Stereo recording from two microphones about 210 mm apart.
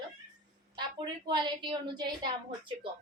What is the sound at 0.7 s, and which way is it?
A woman's voice, 20° right (ahead or behind).